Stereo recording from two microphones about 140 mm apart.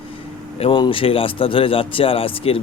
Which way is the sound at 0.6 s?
35° left (ahead or behind).